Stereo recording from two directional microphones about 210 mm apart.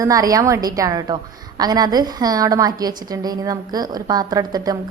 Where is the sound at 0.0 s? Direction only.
15° right (ahead or behind).